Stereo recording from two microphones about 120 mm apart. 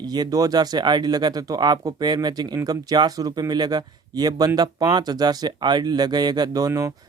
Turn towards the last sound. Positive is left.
turn(degrees=-25)  # may be behind; listen again after turning